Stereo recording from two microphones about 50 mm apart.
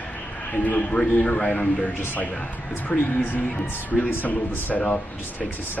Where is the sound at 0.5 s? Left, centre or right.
Left.